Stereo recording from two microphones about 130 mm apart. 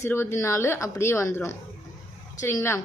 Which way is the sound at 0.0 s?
20° left (ahead or behind).